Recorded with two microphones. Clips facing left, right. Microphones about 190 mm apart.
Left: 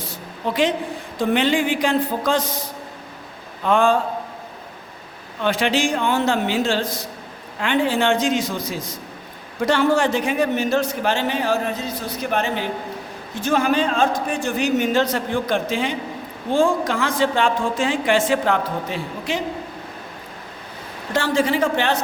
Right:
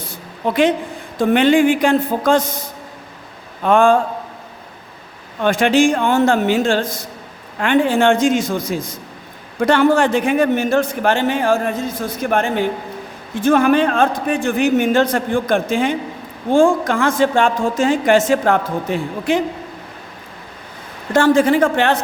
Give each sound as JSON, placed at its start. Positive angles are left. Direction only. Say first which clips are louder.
{"t": 0.4, "sound": "a man's voice", "louder": "right 5 dB", "side_deg": -55}
{"t": 5.4, "sound": "a man's voice", "louder": "right 6 dB", "side_deg": -50}
{"t": 21.1, "sound": "a man's voice", "louder": "right 7 dB", "side_deg": -50}